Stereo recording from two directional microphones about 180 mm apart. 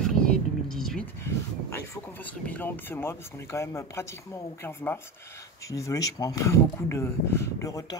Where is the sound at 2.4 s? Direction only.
10° left (ahead or behind).